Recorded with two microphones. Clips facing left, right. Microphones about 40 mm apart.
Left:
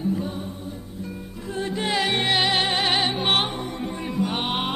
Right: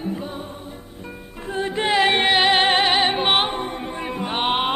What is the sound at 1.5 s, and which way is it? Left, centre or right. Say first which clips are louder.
Music: right 4 dB; right.